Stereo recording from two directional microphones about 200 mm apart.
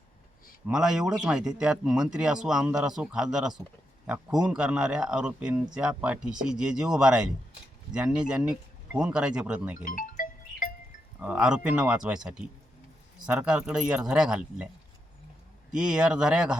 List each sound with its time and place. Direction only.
0.7 s a man's voice: 5° right (ahead or behind)
9.8 s music: 40° left (ahead or behind)
11.2 s a man's voice: 5° right (ahead or behind)
15.7 s a man's voice: 5° right (ahead or behind)